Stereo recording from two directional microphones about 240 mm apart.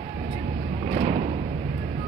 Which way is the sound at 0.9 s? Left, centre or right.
Right.